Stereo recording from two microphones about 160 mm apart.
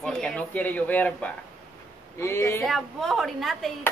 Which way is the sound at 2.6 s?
Centre (ahead or behind).